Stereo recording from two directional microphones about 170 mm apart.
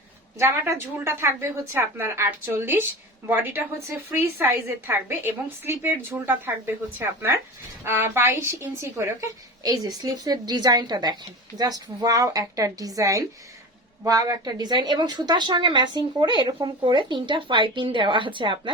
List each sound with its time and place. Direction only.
0.3 s a woman's voice: 15° right (ahead or behind)
7.9 s a woman's voice: 15° right (ahead or behind)